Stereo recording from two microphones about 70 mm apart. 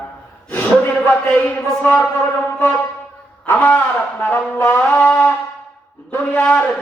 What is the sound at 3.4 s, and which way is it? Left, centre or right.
A man's voice, left.